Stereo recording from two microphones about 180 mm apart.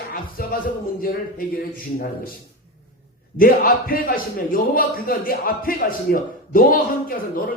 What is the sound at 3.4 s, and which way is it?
A man's voice, 55° left (ahead or behind).